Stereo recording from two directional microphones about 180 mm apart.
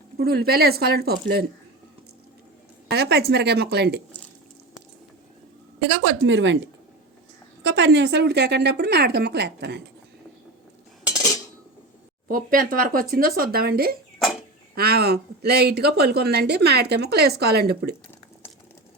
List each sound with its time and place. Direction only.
0.2 s a woman's voice: 60° right (ahead or behind)
2.9 s a woman's voice: 65° right (ahead or behind)
5.9 s a woman's voice: 85° right
7.6 s a woman's voice: 70° right (ahead or behind)
12.3 s a woman's voice: 50° right (ahead or behind)
14.2 s a sound: centre (ahead or behind)
14.8 s a woman's voice: 60° right (ahead or behind)